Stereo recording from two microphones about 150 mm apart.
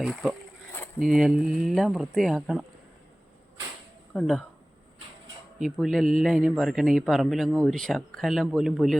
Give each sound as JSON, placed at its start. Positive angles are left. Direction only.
{"t": 0.0, "sound": "speech", "side_deg": -5}
{"t": 4.1, "sound": "speech", "side_deg": 5}
{"t": 5.5, "sound": "speech", "side_deg": 0}